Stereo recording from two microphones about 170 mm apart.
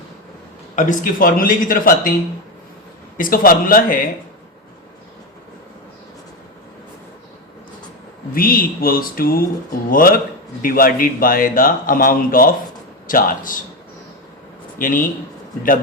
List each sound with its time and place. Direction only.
0.8 s a man's voice: 55° left (ahead or behind)
3.2 s a man's voice: 55° left (ahead or behind)
8.3 s a man's voice: 55° left (ahead or behind)
14.8 s a man's voice: 55° left (ahead or behind)